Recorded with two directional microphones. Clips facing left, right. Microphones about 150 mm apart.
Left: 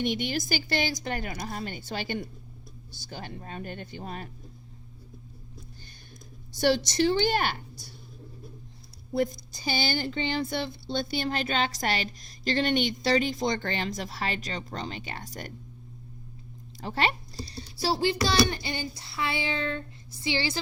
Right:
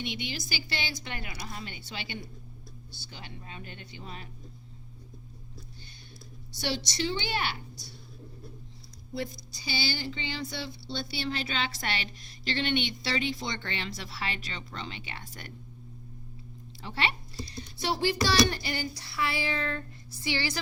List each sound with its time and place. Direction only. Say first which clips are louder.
0.0 s speech: left 8 dB; 50° left (ahead or behind)
6.5 s speech: left 9 dB; 50° left (ahead or behind)
9.1 s speech: left 8 dB; 50° left (ahead or behind)
16.7 s a child's voice: left 4 dB; 40° left (ahead or behind); by 20.6 s 25° left (ahead or behind)